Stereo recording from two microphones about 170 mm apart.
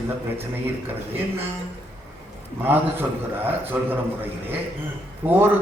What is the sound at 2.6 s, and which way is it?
A man's voice, 10° right (ahead or behind).